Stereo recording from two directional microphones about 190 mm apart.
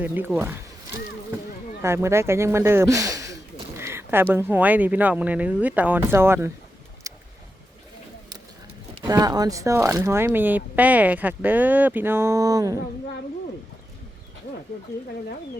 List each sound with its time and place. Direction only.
0.0 s speech: 10° right (ahead or behind)
1.8 s speech: 15° right (ahead or behind)
7.1 s boat: 15° right (ahead or behind)
9.0 s speech: 20° right (ahead or behind)